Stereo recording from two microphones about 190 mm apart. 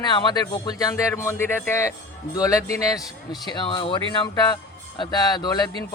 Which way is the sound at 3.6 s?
25° left (ahead or behind).